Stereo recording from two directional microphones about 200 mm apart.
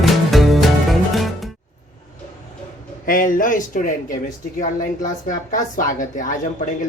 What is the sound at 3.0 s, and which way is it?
Speech, 45° left (ahead or behind).